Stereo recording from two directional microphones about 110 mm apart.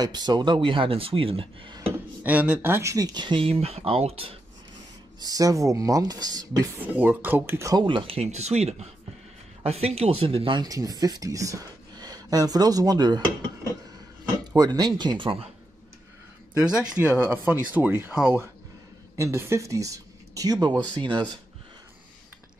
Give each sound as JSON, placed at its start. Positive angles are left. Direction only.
{"t": 0.0, "sound": "speech", "side_deg": -40}
{"t": 0.7, "sound": "speech", "side_deg": -55}
{"t": 1.8, "sound": "speech", "side_deg": -15}
{"t": 3.2, "sound": "speech", "side_deg": -50}
{"t": 5.2, "sound": "speech", "side_deg": -35}
{"t": 7.0, "sound": "speech", "side_deg": -15}
{"t": 7.7, "sound": "speech", "side_deg": -50}
{"t": 9.6, "sound": "speech", "side_deg": -65}
{"t": 10.6, "sound": "speech", "side_deg": -35}
{"t": 14.5, "sound": "speech", "side_deg": -35}
{"t": 16.9, "sound": "speech", "side_deg": -15}